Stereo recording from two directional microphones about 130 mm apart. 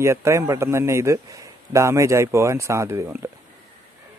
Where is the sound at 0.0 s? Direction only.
20° right (ahead or behind).